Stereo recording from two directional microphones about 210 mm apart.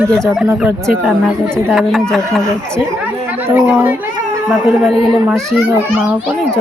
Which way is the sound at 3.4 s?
10° right (ahead or behind).